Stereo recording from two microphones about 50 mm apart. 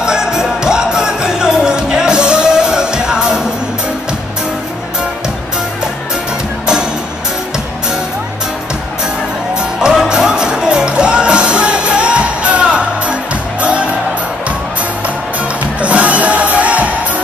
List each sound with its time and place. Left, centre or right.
0.0 s music: centre
9.8 s music: centre
15.8 s music: right